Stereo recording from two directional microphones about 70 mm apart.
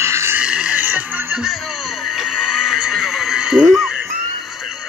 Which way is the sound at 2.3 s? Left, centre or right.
Centre.